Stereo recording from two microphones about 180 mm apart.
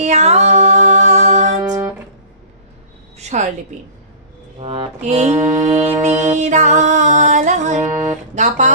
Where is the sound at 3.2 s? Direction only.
40° right (ahead or behind).